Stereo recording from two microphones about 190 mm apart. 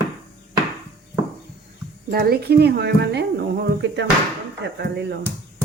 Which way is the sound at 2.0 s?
55° right (ahead or behind).